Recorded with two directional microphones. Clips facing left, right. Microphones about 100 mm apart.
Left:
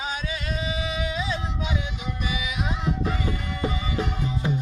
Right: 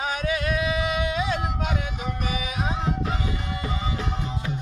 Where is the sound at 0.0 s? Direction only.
55° right (ahead or behind).